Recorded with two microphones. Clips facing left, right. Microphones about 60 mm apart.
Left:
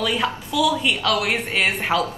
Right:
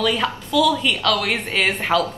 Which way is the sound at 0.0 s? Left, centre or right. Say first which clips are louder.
Right 2 dB; centre.